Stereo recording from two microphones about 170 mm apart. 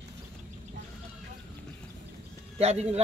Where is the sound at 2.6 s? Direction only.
40° right (ahead or behind).